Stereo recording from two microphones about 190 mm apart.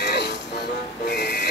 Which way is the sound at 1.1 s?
60° left (ahead or behind).